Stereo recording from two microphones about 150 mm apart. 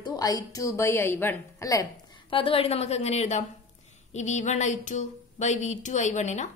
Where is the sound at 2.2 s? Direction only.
35° left (ahead or behind); by 6.5 s 50° left (ahead or behind).